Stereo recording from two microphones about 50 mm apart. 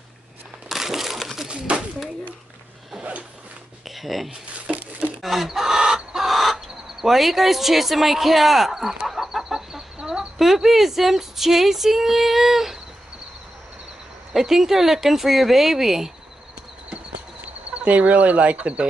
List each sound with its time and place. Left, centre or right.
0.7 s crumpling: centre
1.5 s a sound: right
3.0 s zipper: right
3.9 s speech: centre
4.7 s a sound: centre
5.2 s chicken: centre
10.4 s speech: centre
14.3 s speech: centre
17.7 s speech: right